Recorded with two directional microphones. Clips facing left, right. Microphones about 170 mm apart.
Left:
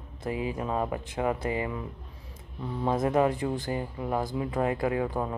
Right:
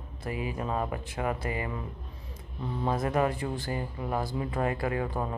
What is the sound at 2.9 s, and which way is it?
Speech, 20° left (ahead or behind).